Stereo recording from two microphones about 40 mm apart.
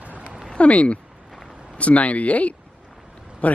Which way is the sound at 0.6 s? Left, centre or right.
Left.